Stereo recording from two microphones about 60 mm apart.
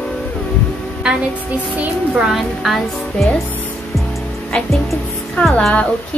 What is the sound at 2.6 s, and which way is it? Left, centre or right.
Music, centre.